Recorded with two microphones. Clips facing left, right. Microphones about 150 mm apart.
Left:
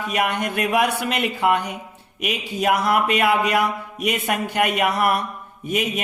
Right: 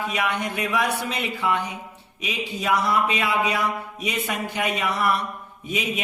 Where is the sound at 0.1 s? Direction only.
50° left (ahead or behind).